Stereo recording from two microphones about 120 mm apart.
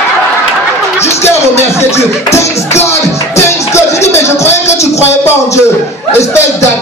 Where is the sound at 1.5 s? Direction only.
25° left (ahead or behind).